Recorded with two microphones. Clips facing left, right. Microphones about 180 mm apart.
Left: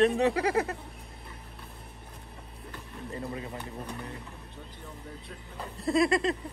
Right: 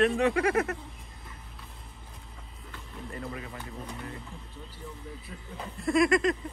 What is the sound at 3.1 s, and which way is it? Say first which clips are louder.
Music: left 3 dB; 25° left (ahead or behind).